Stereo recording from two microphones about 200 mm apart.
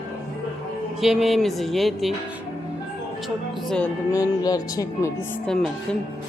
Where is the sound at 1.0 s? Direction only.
Centre (ahead or behind).